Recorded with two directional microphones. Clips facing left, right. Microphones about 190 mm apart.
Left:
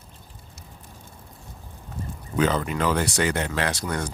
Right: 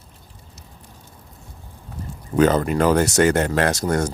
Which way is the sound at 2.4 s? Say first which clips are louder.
Right 6 dB; 45° right (ahead or behind).